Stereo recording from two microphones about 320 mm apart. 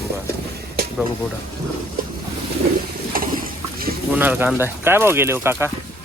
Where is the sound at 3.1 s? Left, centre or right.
Right.